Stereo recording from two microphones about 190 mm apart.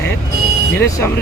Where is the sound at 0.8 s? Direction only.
15° left (ahead or behind).